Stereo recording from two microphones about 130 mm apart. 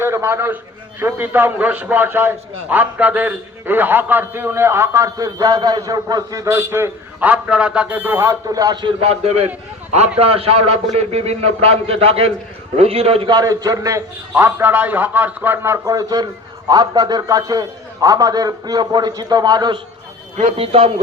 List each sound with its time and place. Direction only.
0.0 s a man's voice: 20° right (ahead or behind)
8.4 s a man's voice: 30° right (ahead or behind)
9.0 s a man's voice: 50° right (ahead or behind)
13.2 s a man's voice: 30° right (ahead or behind)
20.6 s a man's voice: 50° right (ahead or behind)